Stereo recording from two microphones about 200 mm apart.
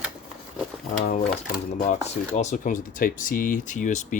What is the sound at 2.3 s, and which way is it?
Speech, 35° left (ahead or behind).